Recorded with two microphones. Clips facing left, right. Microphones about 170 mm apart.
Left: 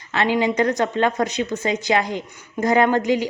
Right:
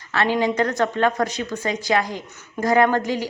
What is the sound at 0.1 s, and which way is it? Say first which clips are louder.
A woman's voice: left 1 dB; 15° left (ahead or behind).